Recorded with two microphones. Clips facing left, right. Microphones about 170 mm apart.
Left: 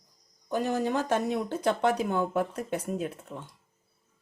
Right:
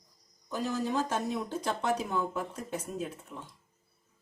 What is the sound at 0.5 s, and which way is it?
Speech, 60° left (ahead or behind).